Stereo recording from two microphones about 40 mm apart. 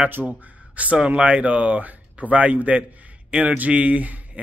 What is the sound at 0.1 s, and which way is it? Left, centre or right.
Speech, right.